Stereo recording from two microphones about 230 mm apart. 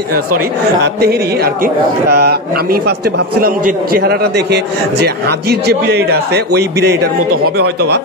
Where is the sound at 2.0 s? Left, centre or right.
Right.